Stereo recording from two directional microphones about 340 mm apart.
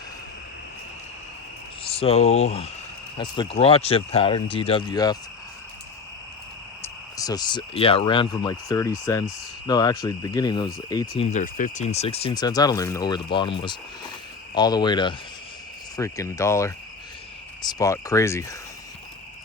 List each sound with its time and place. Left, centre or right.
1.8 s speech: centre
6.8 s speech: centre
11.2 s speech: left